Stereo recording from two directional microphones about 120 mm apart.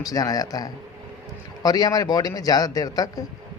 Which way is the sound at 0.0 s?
30° left (ahead or behind).